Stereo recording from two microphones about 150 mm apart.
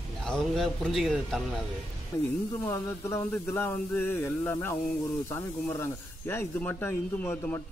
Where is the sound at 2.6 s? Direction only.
20° left (ahead or behind).